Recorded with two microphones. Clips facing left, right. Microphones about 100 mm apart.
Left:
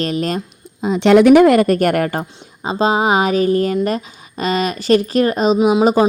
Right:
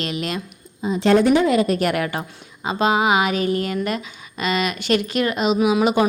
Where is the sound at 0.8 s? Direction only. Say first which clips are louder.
Left 6 dB; 80° left; by 2.2 s 45° left (ahead or behind).